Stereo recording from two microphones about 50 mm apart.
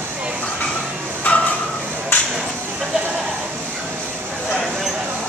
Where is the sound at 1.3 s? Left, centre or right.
Left.